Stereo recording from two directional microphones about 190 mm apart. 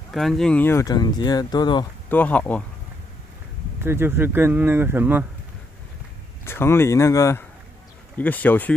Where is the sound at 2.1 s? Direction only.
10° left (ahead or behind).